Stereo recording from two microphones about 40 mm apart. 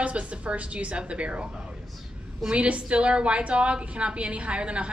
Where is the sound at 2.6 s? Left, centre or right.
Right.